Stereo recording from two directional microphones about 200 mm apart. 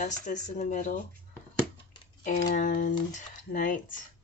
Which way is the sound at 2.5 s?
40° left (ahead or behind).